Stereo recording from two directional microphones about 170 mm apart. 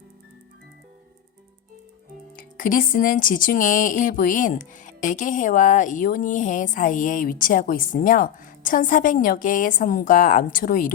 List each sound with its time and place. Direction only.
2.6 s speech: 50° left (ahead or behind)